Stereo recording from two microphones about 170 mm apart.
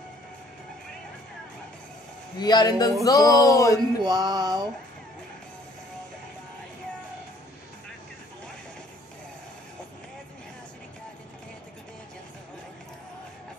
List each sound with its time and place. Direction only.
2.3 s speech: 25° left (ahead or behind)
4.0 s music: 25° right (ahead or behind)